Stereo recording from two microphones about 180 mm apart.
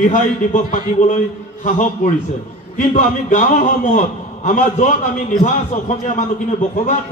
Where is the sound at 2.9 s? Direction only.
45° left (ahead or behind).